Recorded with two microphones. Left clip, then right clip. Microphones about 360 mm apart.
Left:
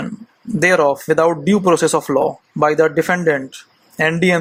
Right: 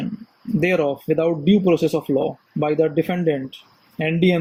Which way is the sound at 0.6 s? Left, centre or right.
Left.